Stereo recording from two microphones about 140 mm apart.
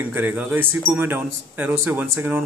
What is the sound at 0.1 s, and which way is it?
Speech, 10° right (ahead or behind).